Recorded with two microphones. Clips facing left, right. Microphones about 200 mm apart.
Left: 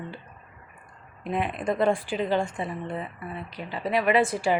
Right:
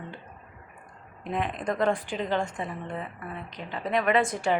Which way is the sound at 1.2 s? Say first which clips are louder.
Left 2 dB; 10° left (ahead or behind).